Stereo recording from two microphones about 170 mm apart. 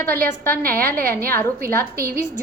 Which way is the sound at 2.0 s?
60° right (ahead or behind).